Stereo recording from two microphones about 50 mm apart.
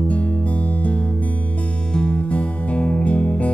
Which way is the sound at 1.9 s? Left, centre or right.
Left.